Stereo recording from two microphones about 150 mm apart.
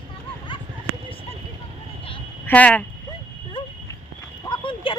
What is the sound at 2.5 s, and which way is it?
Speech, 10° left (ahead or behind).